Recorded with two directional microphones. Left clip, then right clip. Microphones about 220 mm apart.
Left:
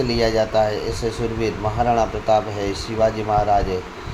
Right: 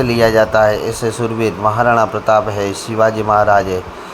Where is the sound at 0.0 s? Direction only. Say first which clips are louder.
Right 7 dB; 15° right (ahead or behind).